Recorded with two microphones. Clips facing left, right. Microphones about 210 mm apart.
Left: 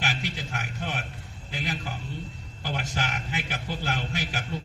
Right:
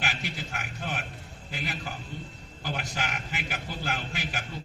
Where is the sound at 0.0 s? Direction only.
40° left (ahead or behind).